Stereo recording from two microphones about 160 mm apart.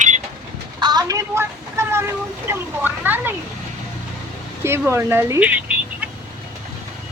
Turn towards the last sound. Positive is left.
turn(degrees=-10)  # may be behind; listen again after turning